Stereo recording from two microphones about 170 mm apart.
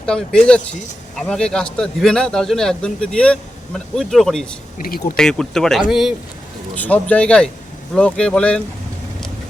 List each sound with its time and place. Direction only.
0.0 s a man's voice: 5° left (ahead or behind)
4.8 s speech: 60° left (ahead or behind)
5.1 s a man's voice: 5° left (ahead or behind)
6.7 s a man's voice: 10° left (ahead or behind)